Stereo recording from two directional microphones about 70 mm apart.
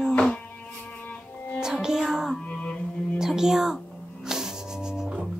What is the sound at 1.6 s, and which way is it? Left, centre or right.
Music, centre.